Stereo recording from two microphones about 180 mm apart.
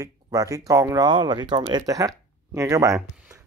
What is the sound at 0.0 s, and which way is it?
Speech, 20° right (ahead or behind).